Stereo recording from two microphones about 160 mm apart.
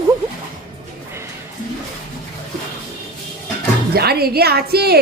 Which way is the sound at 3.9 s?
80° right.